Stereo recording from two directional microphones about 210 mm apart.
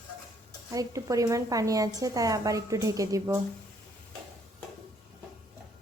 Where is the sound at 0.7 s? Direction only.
15° right (ahead or behind).